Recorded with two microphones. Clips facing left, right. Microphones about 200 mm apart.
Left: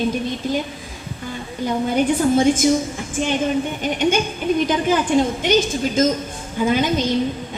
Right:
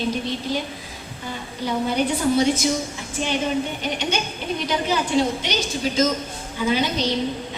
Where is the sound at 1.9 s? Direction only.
50° left (ahead or behind).